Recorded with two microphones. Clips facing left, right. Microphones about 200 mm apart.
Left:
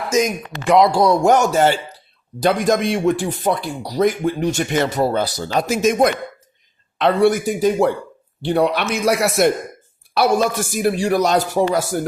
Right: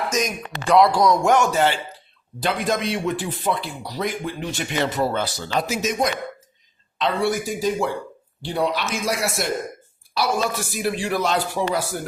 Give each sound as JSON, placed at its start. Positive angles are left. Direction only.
{"t": 0.7, "sound": "speech", "side_deg": 25}